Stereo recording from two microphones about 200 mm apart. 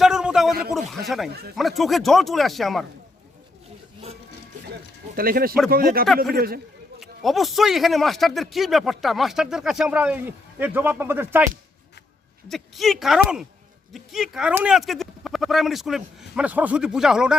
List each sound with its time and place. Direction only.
0.0 s a sound: 5° right (ahead or behind)
0.7 s speech: centre (ahead or behind)
5.1 s speech: 45° right (ahead or behind)
7.0 s speech: centre (ahead or behind)
12.5 s speech: centre (ahead or behind)